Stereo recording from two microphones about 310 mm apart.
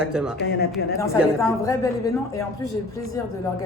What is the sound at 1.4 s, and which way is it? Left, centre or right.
A man's voice, centre.